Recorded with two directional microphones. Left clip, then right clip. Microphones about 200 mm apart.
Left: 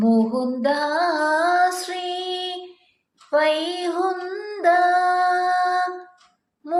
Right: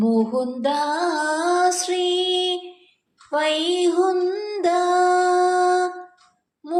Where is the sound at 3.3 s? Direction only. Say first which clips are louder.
Left 1 dB; 35° right (ahead or behind).